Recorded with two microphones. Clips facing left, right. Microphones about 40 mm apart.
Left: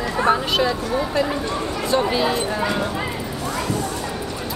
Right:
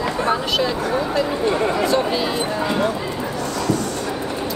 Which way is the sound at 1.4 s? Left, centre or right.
Right.